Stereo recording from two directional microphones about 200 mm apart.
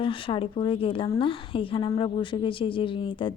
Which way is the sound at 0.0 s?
25° left (ahead or behind).